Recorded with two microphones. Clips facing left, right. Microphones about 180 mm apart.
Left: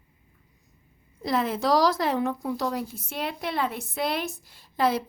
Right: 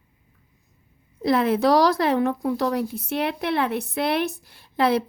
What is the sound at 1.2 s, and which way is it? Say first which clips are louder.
A woman's voice: right 6 dB; 65° right (ahead or behind).